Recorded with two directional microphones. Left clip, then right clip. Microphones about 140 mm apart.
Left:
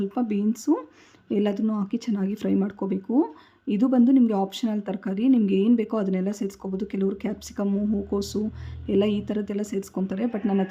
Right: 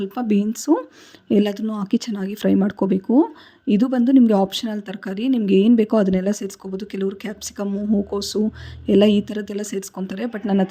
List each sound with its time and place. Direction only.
0.0 s a woman's voice: 40° right (ahead or behind)